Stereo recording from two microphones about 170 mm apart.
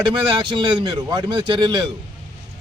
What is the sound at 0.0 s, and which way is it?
A man's voice, 25° right (ahead or behind).